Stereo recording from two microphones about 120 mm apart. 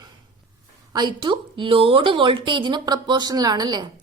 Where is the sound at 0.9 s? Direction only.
35° right (ahead or behind).